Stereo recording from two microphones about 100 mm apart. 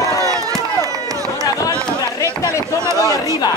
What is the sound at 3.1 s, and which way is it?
Chatter, 35° right (ahead or behind).